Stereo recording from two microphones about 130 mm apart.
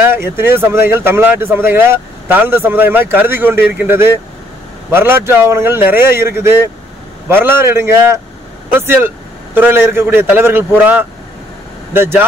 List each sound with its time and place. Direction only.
0.0 s a man's voice: 15° right (ahead or behind)